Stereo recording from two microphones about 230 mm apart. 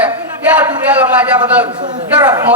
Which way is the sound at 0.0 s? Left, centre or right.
Centre.